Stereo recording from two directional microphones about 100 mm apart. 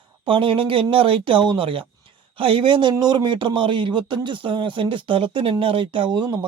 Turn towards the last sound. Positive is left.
turn(degrees=-50)  # may be behind; listen again after turning